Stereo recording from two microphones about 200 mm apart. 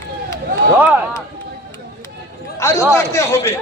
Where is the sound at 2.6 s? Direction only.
15° left (ahead or behind).